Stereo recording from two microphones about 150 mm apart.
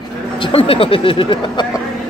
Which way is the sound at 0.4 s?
40° left (ahead or behind).